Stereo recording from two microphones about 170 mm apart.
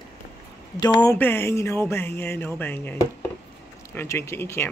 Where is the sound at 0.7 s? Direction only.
25° left (ahead or behind).